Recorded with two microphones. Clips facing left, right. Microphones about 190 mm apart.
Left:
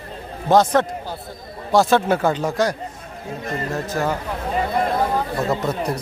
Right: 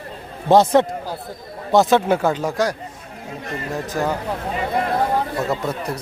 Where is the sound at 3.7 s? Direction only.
15° right (ahead or behind).